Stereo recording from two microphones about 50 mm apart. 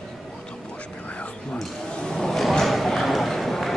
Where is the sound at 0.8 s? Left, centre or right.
Left.